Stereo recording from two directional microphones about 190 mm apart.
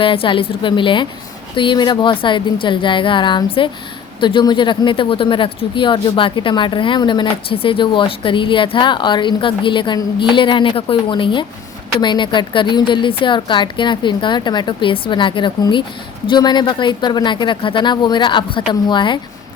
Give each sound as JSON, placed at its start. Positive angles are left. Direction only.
{"t": 0.0, "sound": "speech", "side_deg": 25}